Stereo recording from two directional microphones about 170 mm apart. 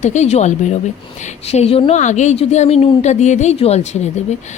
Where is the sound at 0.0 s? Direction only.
45° left (ahead or behind).